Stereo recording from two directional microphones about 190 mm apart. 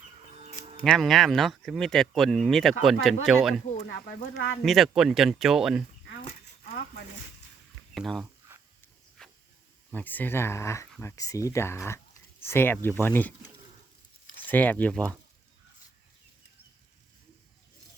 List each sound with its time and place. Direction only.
0.3 s a sound: 30° right (ahead or behind)
0.9 s speech: centre (ahead or behind)
3.8 s speech: 75° left (ahead or behind)
4.6 s speech: centre (ahead or behind)
7.9 s speech: centre (ahead or behind)
9.9 s speech: 10° left (ahead or behind)
14.4 s speech: 10° left (ahead or behind)